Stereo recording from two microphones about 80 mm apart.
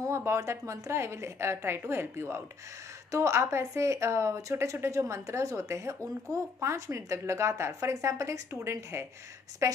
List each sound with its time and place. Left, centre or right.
0.0 s speech: right